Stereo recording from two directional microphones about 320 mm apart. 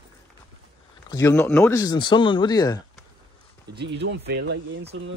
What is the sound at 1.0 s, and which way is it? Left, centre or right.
Speech, centre.